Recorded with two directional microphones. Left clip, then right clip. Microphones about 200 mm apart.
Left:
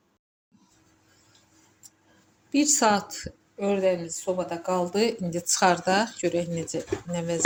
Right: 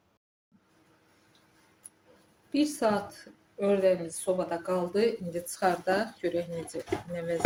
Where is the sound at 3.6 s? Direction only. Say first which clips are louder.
Left 1 dB; 20° left (ahead or behind).